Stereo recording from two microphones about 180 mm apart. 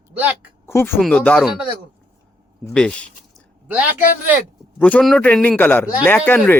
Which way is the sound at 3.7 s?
10° right (ahead or behind).